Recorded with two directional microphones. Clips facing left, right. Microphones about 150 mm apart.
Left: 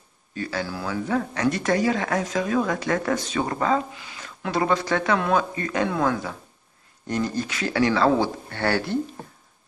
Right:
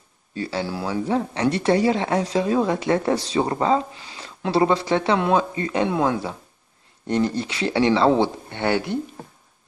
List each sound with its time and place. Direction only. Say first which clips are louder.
0.3 s speech: right 3 dB; 30° right (ahead or behind)